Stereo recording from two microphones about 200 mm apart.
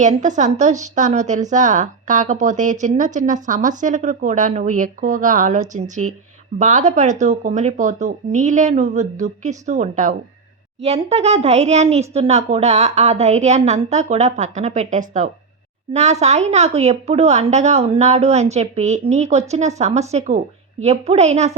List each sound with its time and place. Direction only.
0.0 s a woman's voice: 40° right (ahead or behind)